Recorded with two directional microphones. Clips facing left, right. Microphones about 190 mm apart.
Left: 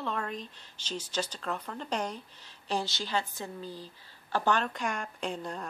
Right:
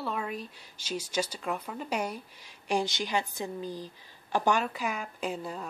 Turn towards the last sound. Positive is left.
turn(degrees=-5)  # may be behind; listen again after turning